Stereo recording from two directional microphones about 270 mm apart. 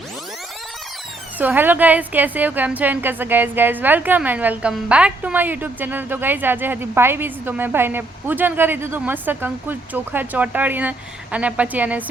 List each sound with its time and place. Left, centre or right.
1.4 s a woman's voice: centre